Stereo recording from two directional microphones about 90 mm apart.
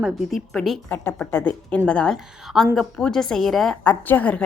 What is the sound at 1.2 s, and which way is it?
Speech, 20° left (ahead or behind).